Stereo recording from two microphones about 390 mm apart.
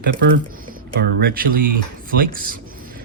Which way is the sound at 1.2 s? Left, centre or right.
Right.